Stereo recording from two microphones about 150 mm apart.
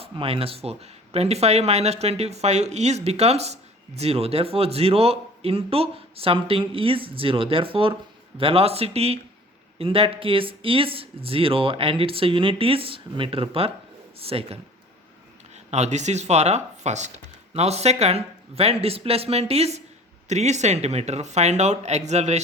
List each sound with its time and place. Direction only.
0.0 s speech: 40° right (ahead or behind)
15.7 s speech: 50° right (ahead or behind)